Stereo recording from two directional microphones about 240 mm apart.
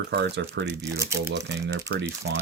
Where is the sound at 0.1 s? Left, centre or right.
Right.